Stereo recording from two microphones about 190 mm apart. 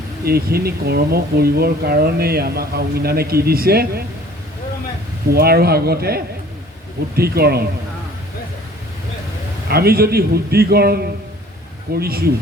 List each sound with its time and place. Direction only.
0.3 s speech: 55° right (ahead or behind)
5.3 s speech: 55° right (ahead or behind)
9.6 s speech: 55° right (ahead or behind)